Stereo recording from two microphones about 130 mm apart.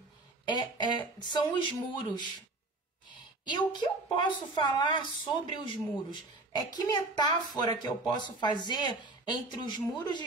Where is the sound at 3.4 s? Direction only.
35° left (ahead or behind).